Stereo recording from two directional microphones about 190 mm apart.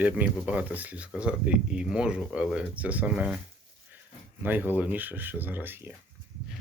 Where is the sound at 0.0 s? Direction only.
5° right (ahead or behind).